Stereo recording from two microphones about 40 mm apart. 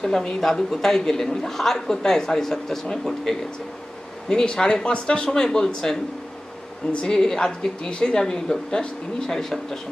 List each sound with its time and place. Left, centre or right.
0.0 s a woman's voice: centre
4.3 s a woman's voice: centre